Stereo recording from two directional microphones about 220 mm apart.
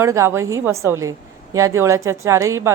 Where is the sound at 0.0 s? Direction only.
15° right (ahead or behind).